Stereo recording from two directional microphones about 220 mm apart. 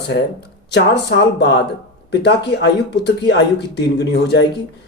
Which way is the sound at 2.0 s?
50° left (ahead or behind).